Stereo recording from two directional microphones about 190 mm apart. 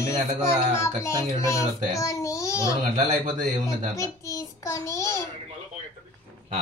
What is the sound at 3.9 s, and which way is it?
A child's voice, 15° left (ahead or behind).